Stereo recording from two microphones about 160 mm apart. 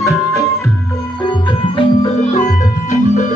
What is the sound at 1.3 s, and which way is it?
Music, 30° left (ahead or behind).